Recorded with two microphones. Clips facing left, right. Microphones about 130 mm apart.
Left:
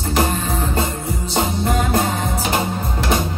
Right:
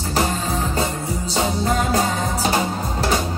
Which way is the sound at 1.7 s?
35° right (ahead or behind).